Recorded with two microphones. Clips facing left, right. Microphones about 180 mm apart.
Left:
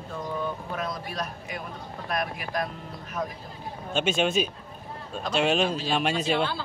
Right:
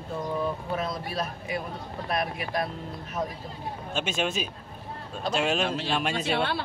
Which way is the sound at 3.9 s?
Centre (ahead or behind).